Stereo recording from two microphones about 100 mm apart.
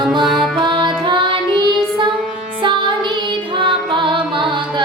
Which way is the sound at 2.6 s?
55° right (ahead or behind).